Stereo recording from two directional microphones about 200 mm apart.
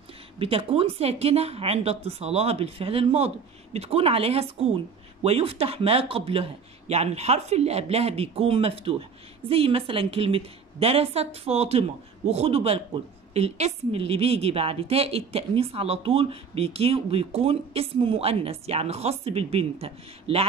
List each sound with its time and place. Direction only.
0.4 s a woman's voice: 30° right (ahead or behind)